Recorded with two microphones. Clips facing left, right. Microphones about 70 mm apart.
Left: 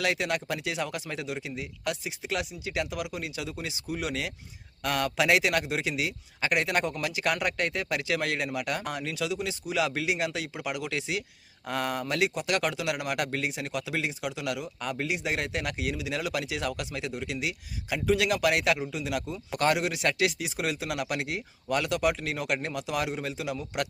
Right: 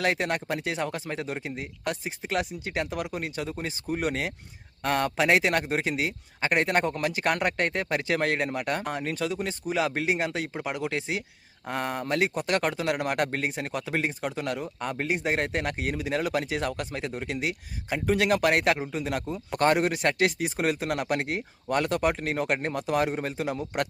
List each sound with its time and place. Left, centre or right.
0.0 s speech: right